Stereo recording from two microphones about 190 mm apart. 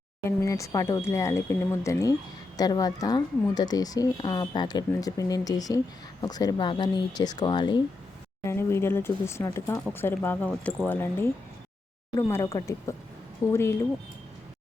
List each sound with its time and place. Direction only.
0.3 s speech: 15° left (ahead or behind)
8.4 s speech: 15° left (ahead or behind)